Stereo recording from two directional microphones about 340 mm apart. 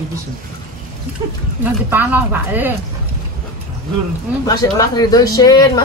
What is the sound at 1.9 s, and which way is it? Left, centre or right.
Speech, centre.